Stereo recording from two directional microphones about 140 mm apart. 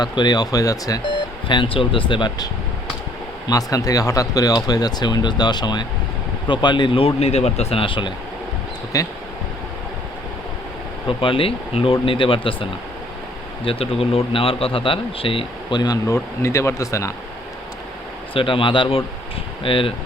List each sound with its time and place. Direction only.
0.0 s speech: 30° left (ahead or behind)
1.5 s speech: 35° left (ahead or behind)
3.5 s speech: 25° left (ahead or behind)
8.9 s speech: 25° left (ahead or behind)
11.2 s speech: 40° left (ahead or behind)
13.7 s speech: 45° left (ahead or behind); by 17.1 s 20° left (ahead or behind)
18.3 s speech: 40° left (ahead or behind)